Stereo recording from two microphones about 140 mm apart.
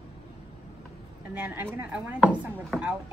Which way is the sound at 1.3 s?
15° right (ahead or behind).